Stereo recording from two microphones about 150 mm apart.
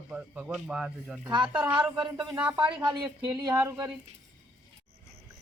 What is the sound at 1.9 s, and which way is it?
A woman's voice, 30° right (ahead or behind).